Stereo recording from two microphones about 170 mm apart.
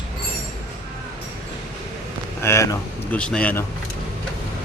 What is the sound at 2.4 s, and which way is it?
Speech, 15° left (ahead or behind).